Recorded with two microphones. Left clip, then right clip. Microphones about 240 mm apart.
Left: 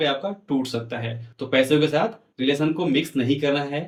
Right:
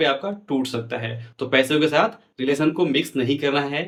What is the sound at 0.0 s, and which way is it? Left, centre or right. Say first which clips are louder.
Speech: right 2 dB; centre.